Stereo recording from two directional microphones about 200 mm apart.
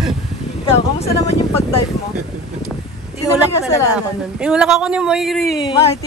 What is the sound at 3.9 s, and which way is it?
Speech, 5° right (ahead or behind).